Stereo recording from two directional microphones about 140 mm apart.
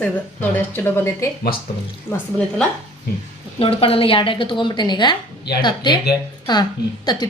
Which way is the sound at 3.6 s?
40° left (ahead or behind).